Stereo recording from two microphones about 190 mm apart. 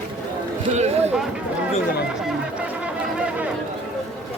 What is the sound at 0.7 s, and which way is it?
Speech, 35° right (ahead or behind).